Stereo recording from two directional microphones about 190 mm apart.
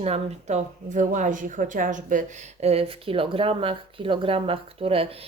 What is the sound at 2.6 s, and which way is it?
Speech, 30° right (ahead or behind).